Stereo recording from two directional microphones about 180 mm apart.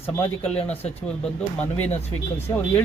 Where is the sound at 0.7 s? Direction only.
35° left (ahead or behind).